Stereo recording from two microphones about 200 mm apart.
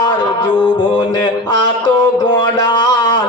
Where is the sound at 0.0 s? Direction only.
25° left (ahead or behind).